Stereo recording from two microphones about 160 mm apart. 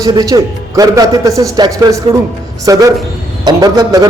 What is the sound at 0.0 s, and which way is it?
A man's voice, 20° right (ahead or behind).